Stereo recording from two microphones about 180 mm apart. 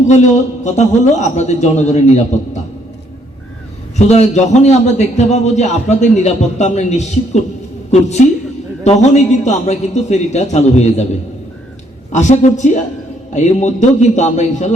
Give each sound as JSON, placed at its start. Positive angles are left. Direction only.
{"t": 0.1, "sound": "a man's voice", "side_deg": 40}
{"t": 3.9, "sound": "a man's voice", "side_deg": 40}
{"t": 12.1, "sound": "a man's voice", "side_deg": 40}